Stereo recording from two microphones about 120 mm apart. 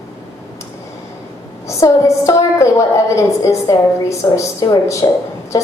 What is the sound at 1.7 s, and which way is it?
A woman's voice, 25° left (ahead or behind).